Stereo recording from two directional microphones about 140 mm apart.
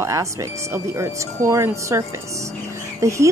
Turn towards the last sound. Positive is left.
turn(degrees=-20)  # may be behind; listen again after turning